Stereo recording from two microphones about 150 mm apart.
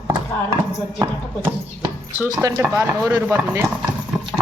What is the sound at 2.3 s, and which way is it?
Speech, 20° right (ahead or behind).